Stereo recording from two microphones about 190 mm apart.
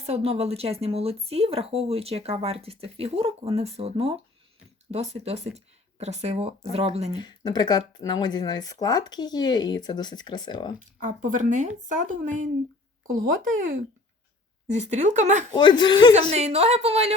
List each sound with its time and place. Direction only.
0.0 s speech: 35° right (ahead or behind)
7.2 s speech: 25° left (ahead or behind)
11.0 s speech: 45° right (ahead or behind)
15.5 s speech: 25° left (ahead or behind)
16.3 s speech: 35° right (ahead or behind)